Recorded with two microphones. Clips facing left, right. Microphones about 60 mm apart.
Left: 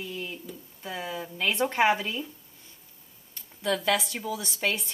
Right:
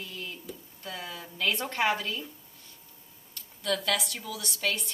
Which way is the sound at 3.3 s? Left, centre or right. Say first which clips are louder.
Left 2 dB; centre.